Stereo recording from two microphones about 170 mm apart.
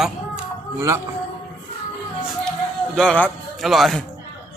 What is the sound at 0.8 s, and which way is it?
Speech, 15° right (ahead or behind).